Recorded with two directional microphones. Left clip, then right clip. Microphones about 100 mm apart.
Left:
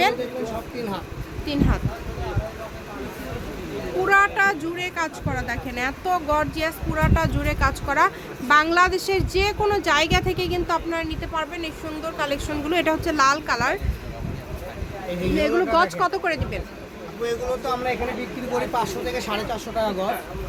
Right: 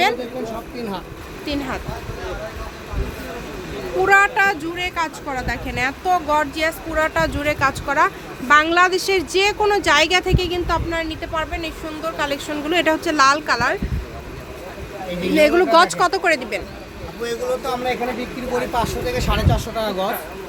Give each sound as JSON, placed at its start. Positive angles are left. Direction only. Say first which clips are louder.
{"t": 0.4, "sound": "speech", "louder": "right 1 dB", "side_deg": 20}
{"t": 1.5, "sound": "a woman's voice", "louder": "even", "side_deg": 0}
{"t": 4.0, "sound": "speech", "louder": "right 4 dB", "side_deg": -5}
{"t": 10.2, "sound": "a woman's voice", "louder": "right 3 dB", "side_deg": 0}
{"t": 15.4, "sound": "speech", "louder": "right 7 dB", "side_deg": -50}
{"t": 17.2, "sound": "speech", "louder": "right 2 dB", "side_deg": -10}
{"t": 18.7, "sound": "a woman's voice", "louder": "right 3 dB", "side_deg": 5}
{"t": 19.7, "sound": "speech", "louder": "left 1 dB", "side_deg": -35}